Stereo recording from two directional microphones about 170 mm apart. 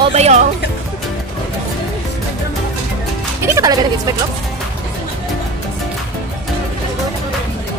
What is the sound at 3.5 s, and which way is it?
Speech, 20° right (ahead or behind).